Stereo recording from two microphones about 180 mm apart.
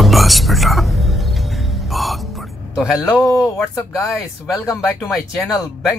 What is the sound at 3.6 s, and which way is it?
Speech, centre (ahead or behind).